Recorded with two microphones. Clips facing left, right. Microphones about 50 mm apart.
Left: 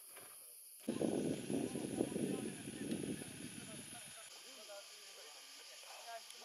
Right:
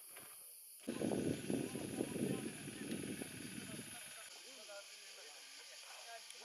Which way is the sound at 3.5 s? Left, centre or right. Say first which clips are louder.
Right 2 dB; right.